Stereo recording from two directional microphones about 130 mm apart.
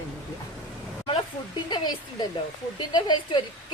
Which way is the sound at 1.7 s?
35° left (ahead or behind).